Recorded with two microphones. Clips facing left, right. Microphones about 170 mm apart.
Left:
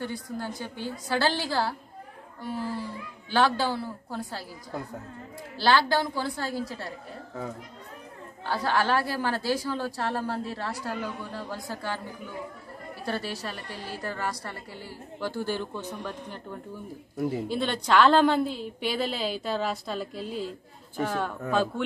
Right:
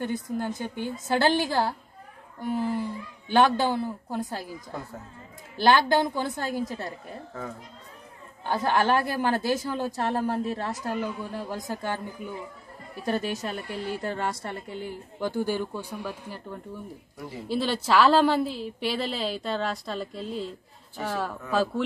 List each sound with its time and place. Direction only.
0.0 s a woman's voice: 20° right (ahead or behind)
5.6 s a woman's voice: 20° right (ahead or behind)
8.5 s a woman's voice: 20° right (ahead or behind)
13.0 s a woman's voice: 15° right (ahead or behind)
17.5 s a woman's voice: 5° right (ahead or behind)